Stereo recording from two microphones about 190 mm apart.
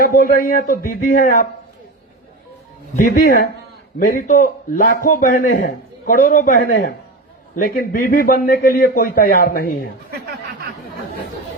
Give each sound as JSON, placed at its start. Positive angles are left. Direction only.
{"t": 0.0, "sound": "a man's voice", "side_deg": 45}
{"t": 2.9, "sound": "a man's voice", "side_deg": 45}